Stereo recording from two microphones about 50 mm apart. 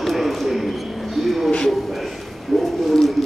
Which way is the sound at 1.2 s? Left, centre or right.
Centre.